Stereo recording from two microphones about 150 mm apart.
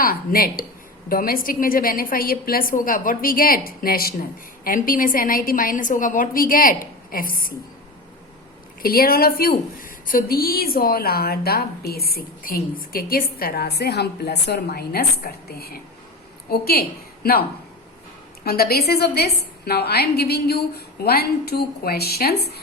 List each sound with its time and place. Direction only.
0.0 s a woman's voice: 75° left (ahead or behind)
8.8 s a woman's voice: 80° left
18.4 s a woman's voice: 90° left